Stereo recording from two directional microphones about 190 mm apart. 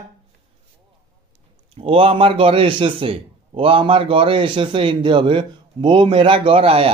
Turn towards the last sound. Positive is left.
turn(degrees=-30)  # may be behind; listen again after turning